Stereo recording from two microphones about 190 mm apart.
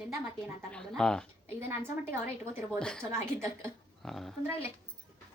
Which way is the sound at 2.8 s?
5° left (ahead or behind).